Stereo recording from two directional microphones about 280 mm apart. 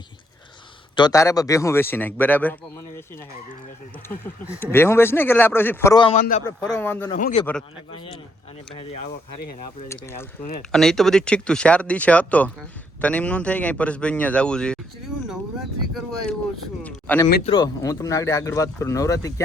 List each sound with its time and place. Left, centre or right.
0.9 s speech: centre
4.6 s speech: centre
6.1 s speech: left
6.7 s speech: centre
7.1 s speech: left
9.4 s speech: left
9.9 s speech: centre
16.8 s speech: centre